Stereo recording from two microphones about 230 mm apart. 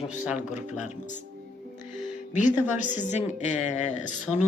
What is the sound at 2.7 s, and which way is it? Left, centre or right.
A woman's voice, left.